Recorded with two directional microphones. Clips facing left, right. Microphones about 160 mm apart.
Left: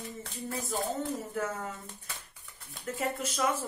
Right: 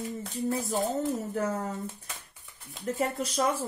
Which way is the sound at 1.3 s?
40° right (ahead or behind).